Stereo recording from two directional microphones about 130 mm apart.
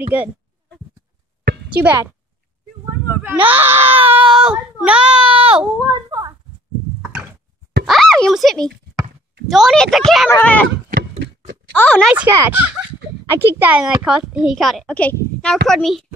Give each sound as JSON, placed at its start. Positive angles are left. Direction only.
{"t": 0.1, "sound": "a child's voice", "side_deg": -10}
{"t": 1.8, "sound": "a child's voice", "side_deg": -15}
{"t": 3.1, "sound": "screaming", "side_deg": -15}
{"t": 4.4, "sound": "child singing", "side_deg": -10}
{"t": 5.2, "sound": "baby cry", "side_deg": -45}
{"t": 6.0, "sound": "a sound", "side_deg": -30}
{"t": 7.0, "sound": "a sound", "side_deg": -15}
{"t": 7.8, "sound": "a sound", "side_deg": 0}
{"t": 9.5, "sound": "a woman's voice", "side_deg": 0}
{"t": 10.4, "sound": "speech", "side_deg": 10}
{"t": 11.7, "sound": "speech", "side_deg": 10}
{"t": 12.3, "sound": "a child's voice", "side_deg": -20}